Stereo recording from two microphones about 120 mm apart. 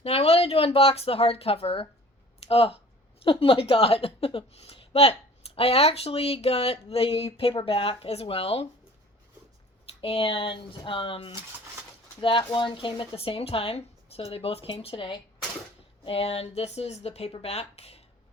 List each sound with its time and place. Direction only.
0.0 s speech: 55° left (ahead or behind)
10.0 s speech: 50° left (ahead or behind)